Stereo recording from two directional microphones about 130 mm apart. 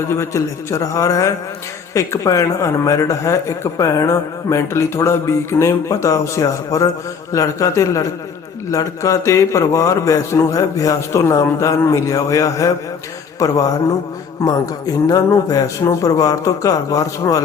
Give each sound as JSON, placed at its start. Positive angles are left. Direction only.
{"t": 0.1, "sound": "a man's voice", "side_deg": 20}